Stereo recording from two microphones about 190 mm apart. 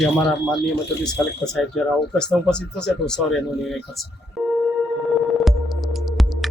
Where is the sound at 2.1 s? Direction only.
5° left (ahead or behind).